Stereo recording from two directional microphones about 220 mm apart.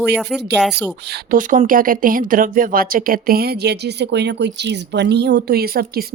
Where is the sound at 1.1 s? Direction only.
40° right (ahead or behind).